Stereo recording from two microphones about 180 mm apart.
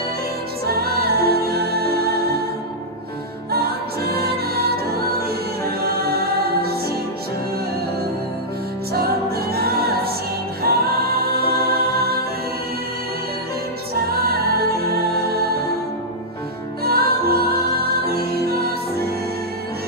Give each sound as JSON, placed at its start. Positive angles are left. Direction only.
{"t": 0.7, "sound": "music", "side_deg": -60}
{"t": 3.5, "sound": "music", "side_deg": -60}
{"t": 8.9, "sound": "music", "side_deg": -60}
{"t": 10.6, "sound": "a capella", "side_deg": -60}
{"t": 14.1, "sound": "music", "side_deg": -60}
{"t": 16.8, "sound": "music", "side_deg": -60}